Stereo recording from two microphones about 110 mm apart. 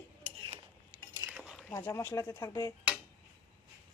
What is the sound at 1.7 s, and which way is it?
Speech, 20° left (ahead or behind).